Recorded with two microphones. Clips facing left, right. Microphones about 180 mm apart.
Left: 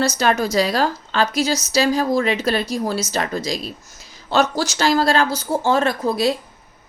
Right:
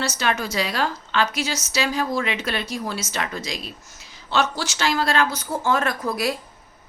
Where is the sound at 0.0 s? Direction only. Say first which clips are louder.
Left 6 dB; 40° left (ahead or behind).